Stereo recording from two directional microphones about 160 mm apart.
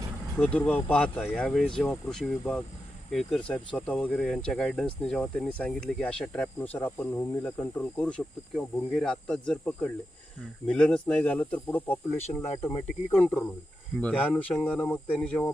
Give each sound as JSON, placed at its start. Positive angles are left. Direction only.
{"t": 0.3, "sound": "speech", "side_deg": 10}
{"t": 13.2, "sound": "speech", "side_deg": 5}